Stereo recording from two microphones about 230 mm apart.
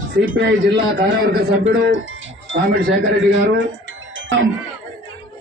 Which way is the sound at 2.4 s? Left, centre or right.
Right.